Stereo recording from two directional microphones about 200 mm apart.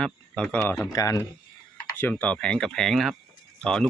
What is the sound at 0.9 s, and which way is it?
Speech, 15° left (ahead or behind).